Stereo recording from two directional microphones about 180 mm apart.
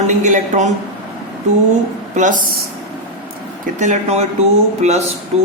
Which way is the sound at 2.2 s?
45° right (ahead or behind).